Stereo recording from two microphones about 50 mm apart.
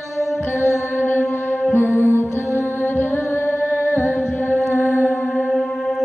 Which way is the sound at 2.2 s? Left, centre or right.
Left.